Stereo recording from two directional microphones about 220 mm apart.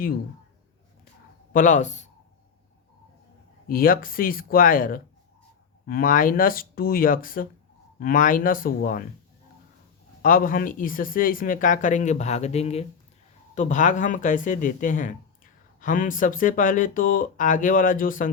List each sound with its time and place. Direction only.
1.5 s speech: 35° left (ahead or behind)
3.7 s speech: 40° left (ahead or behind)
10.2 s speech: 40° left (ahead or behind)